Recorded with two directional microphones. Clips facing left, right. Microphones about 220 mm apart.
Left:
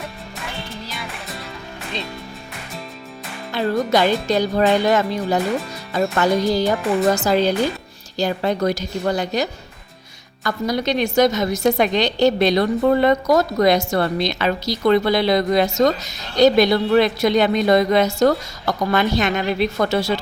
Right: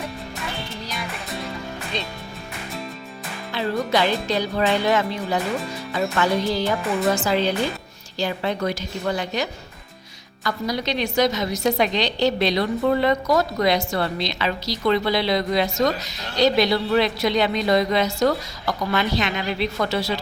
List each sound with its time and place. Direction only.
3.5 s a woman's voice: 45° left (ahead or behind)